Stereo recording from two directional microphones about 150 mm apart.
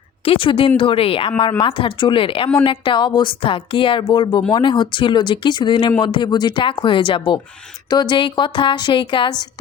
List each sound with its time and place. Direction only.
0.3 s a woman's voice: 35° left (ahead or behind)